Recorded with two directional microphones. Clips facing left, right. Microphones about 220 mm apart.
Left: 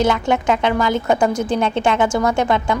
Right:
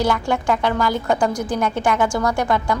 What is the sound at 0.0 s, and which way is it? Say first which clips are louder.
A woman's voice: left 3 dB; 20° left (ahead or behind).